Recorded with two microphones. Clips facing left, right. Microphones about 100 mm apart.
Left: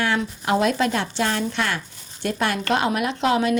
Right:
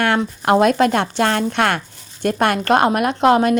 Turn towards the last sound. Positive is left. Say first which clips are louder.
# right 6 dB
turn(degrees=-50)  # may be behind; listen again after turning